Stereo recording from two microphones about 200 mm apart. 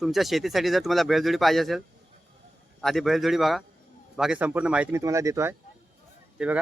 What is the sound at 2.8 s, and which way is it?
Speech, centre (ahead or behind).